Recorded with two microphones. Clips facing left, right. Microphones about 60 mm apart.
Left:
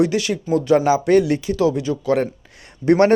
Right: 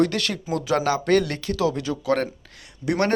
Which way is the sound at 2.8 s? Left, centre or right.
Left.